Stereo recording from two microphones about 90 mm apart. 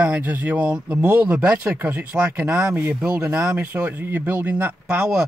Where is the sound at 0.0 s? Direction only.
15° right (ahead or behind).